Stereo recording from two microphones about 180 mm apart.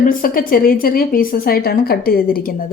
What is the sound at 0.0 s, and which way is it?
A woman's voice, 50° left (ahead or behind).